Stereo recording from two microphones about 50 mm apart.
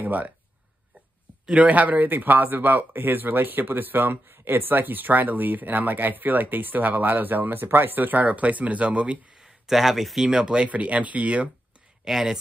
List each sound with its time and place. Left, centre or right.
0.0 s speech: right
1.6 s speech: right
9.3 s a sound: centre
10.2 s speech: centre
12.0 s speech: centre